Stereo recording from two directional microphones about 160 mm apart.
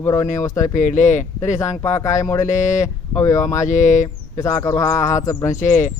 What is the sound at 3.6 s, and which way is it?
Speech, 50° left (ahead or behind).